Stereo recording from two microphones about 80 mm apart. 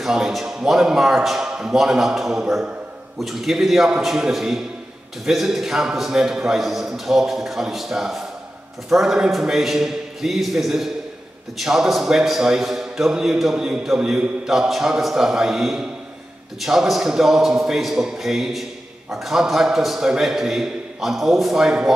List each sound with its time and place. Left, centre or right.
0.0 s a man's voice: centre